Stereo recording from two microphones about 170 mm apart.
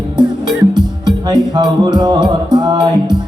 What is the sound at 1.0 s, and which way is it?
Music, 25° right (ahead or behind).